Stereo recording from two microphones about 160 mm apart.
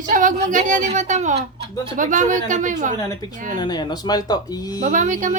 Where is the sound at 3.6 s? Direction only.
25° left (ahead or behind).